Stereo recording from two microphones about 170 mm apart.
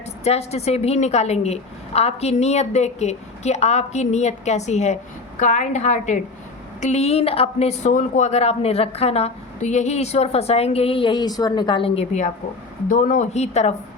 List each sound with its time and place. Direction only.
0.3 s a woman's voice: 40° left (ahead or behind)
12.9 s a woman's voice: 50° left (ahead or behind)